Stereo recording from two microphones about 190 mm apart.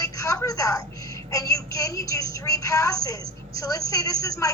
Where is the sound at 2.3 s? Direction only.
15° left (ahead or behind).